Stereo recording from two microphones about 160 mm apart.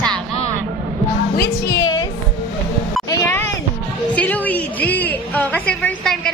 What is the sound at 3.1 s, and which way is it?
Cat, 15° left (ahead or behind).